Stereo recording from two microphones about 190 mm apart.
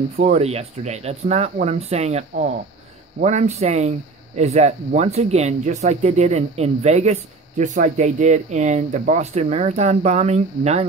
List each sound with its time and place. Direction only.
0.2 s speech: 35° right (ahead or behind)